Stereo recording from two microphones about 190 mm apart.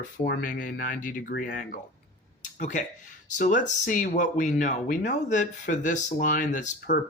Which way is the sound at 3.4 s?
40° left (ahead or behind).